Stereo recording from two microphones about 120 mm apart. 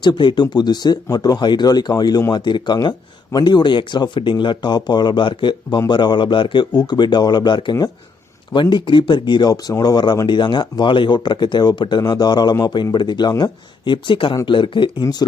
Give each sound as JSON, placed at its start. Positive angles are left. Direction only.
{"t": 0.0, "sound": "speech", "side_deg": 40}
{"t": 15.2, "sound": "speech", "side_deg": 30}